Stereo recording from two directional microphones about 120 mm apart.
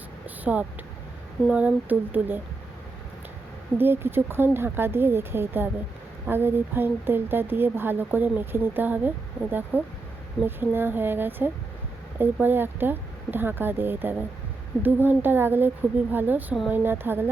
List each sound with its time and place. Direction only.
0.3 s a sound: 15° right (ahead or behind)
1.5 s speech: 10° right (ahead or behind)
3.8 s speech: 20° right (ahead or behind)